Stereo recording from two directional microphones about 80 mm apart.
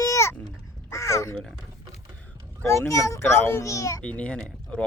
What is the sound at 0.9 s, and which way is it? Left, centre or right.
Crow, left.